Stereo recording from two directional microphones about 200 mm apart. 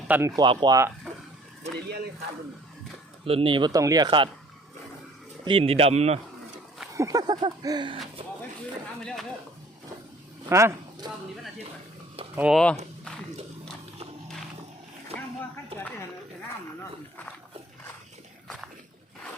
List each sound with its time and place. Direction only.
0.1 s speech: 15° right (ahead or behind)
1.1 s a sound: centre (ahead or behind)
1.6 s speech: 35° right (ahead or behind)
3.2 s speech: 25° right (ahead or behind)
5.5 s speech: 30° right (ahead or behind)
6.9 s speech: 15° right (ahead or behind)
10.5 s speech: 15° right (ahead or behind)
12.4 s speech: centre (ahead or behind)